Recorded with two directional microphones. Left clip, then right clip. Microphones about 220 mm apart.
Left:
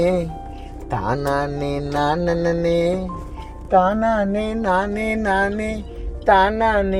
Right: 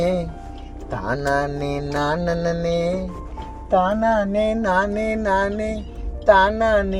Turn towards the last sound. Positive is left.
turn(degrees=30)  # may be behind; listen again after turning